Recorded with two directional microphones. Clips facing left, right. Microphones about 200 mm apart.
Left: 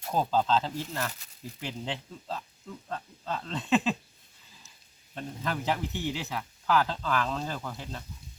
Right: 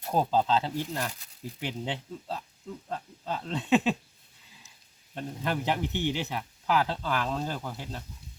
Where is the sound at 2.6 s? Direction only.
15° right (ahead or behind).